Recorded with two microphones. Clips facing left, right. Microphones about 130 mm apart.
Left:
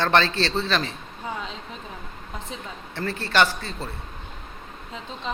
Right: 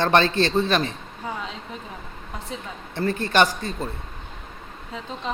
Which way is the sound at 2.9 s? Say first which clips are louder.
Right 2 dB; 15° right (ahead or behind).